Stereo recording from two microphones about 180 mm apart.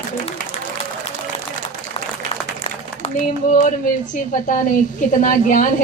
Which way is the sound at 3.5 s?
45° left (ahead or behind).